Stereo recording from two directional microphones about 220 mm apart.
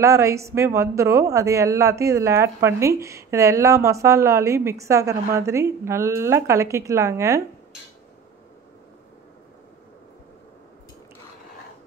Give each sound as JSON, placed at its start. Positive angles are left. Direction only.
{"t": 0.0, "sound": "a woman's voice", "side_deg": -15}